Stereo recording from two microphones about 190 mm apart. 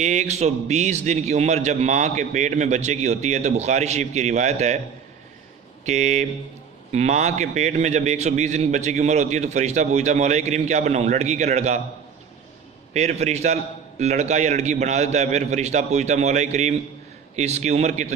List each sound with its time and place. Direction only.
0.0 s a man's voice: 35° right (ahead or behind)
5.8 s a man's voice: 35° right (ahead or behind)
12.9 s a man's voice: 35° right (ahead or behind)